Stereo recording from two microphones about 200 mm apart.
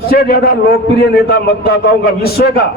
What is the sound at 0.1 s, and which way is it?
A man's voice, 50° left (ahead or behind).